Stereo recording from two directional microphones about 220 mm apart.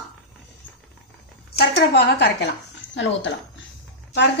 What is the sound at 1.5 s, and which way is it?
A woman's voice, 50° left (ahead or behind).